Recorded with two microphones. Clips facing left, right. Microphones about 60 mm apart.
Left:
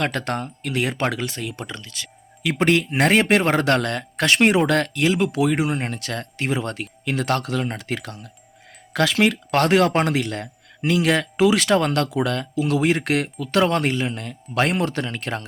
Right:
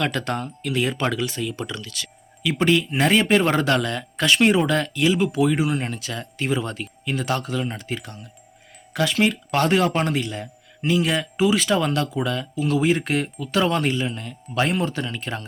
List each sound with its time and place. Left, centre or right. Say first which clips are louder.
0.0 s speech: even; left
1.7 s speech: right 2 dB; left
2.4 s speech: left 1 dB; left